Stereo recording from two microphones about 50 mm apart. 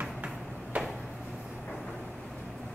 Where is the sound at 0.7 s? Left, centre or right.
Right.